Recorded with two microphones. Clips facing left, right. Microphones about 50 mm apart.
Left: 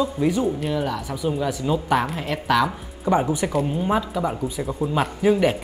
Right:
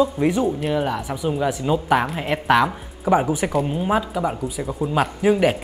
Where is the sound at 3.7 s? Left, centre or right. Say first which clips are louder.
Right 1 dB; centre.